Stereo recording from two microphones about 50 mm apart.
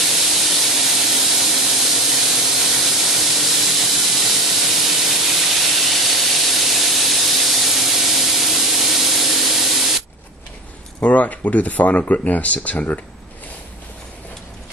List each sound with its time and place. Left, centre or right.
0.0 s steam: centre
11.0 s speech: left